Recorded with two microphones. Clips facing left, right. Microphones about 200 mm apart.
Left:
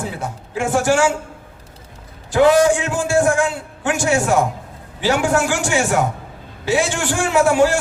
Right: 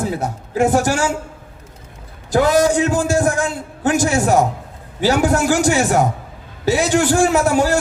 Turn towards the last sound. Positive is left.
turn(degrees=-40)  # may be behind; listen again after turning